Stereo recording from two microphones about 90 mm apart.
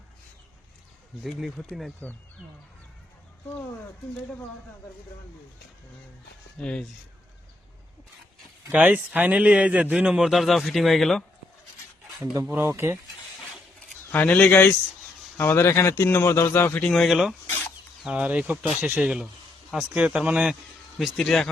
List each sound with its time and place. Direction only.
1.2 s speech: centre (ahead or behind)
6.6 s speech: 10° left (ahead or behind)
8.7 s a man's voice: 15° right (ahead or behind); by 11.2 s centre (ahead or behind)
12.2 s speech: 35° right (ahead or behind)
14.1 s speech: 20° left (ahead or behind)
15.4 s speech: 30° left (ahead or behind)
16.8 s speech: centre (ahead or behind)
17.4 s chicken: 25° left (ahead or behind)
18.0 s a man's voice: 15° right (ahead or behind)
21.0 s speech: 5° left (ahead or behind)